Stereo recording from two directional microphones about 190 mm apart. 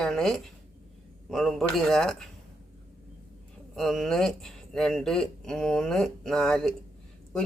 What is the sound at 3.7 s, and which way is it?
Speech, centre (ahead or behind).